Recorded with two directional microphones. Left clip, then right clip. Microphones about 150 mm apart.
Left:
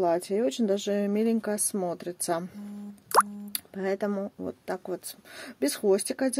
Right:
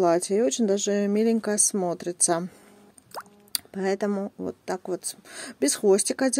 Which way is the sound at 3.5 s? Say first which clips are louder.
Right 4 dB; 25° right (ahead or behind).